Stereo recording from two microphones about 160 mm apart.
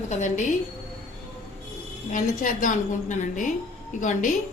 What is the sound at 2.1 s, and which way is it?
A woman's voice, 55° left (ahead or behind).